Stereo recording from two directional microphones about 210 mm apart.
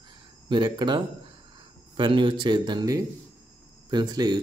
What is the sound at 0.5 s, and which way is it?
A man's voice, 20° right (ahead or behind).